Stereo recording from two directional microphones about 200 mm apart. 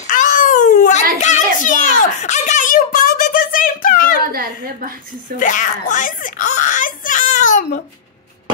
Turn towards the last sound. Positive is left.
turn(degrees=40)  # may be behind; listen again after turning